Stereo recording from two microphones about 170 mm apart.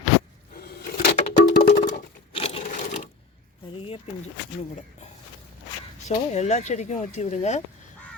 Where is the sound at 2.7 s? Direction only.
45° left (ahead or behind).